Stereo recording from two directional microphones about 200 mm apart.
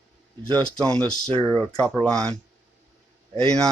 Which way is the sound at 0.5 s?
20° right (ahead or behind).